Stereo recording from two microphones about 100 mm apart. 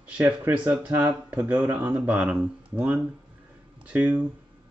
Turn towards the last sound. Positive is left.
turn(degrees=-15)  # may be behind; listen again after turning